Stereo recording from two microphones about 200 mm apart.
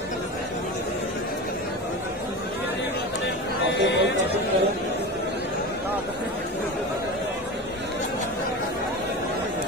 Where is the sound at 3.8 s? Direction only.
60° left (ahead or behind).